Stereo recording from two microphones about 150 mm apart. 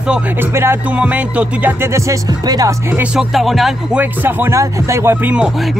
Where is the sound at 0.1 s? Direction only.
15° right (ahead or behind).